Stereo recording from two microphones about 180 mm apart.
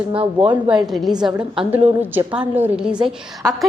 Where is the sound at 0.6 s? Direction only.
Centre (ahead or behind).